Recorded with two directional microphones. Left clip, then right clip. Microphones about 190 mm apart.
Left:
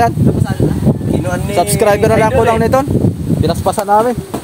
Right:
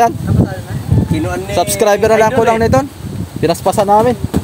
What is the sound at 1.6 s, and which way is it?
Speech, 15° right (ahead or behind).